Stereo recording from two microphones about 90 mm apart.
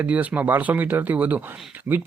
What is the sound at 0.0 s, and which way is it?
Speech, 15° right (ahead or behind).